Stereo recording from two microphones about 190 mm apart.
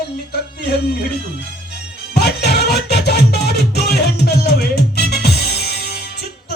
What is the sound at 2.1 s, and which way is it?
Music, 60° left (ahead or behind).